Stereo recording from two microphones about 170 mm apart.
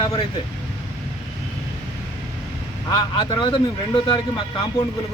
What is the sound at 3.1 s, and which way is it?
Speech, 30° left (ahead or behind).